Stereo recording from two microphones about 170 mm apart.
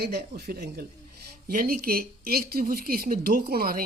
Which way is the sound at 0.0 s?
75° right (ahead or behind).